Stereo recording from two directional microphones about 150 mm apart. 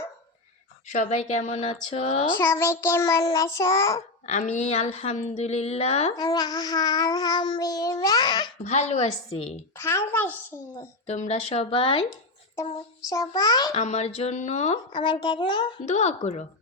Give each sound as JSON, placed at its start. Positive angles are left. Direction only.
{"t": 0.9, "sound": "speech", "side_deg": 55}
{"t": 2.5, "sound": "child singing", "side_deg": 15}
{"t": 4.3, "sound": "speech", "side_deg": 55}
{"t": 6.1, "sound": "child singing", "side_deg": 25}
{"t": 8.6, "sound": "speech", "side_deg": 50}
{"t": 9.7, "sound": "a child's voice", "side_deg": 15}
{"t": 11.0, "sound": "speech", "side_deg": 50}
{"t": 13.1, "sound": "child singing", "side_deg": 25}
{"t": 13.7, "sound": "speech", "side_deg": 45}
{"t": 14.9, "sound": "speech", "side_deg": 30}
{"t": 15.9, "sound": "speech", "side_deg": 50}